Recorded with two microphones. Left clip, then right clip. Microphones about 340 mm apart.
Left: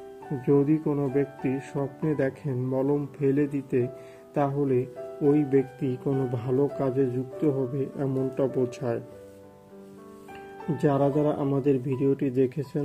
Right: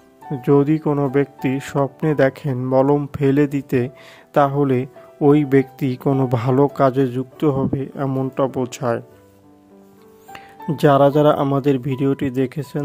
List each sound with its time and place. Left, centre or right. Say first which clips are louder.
0.5 s speech: right 7 dB; right
1.8 s a man's voice: right 14 dB; right
2.1 s a man's voice: right 10 dB; right
10.3 s speech: right 6 dB; right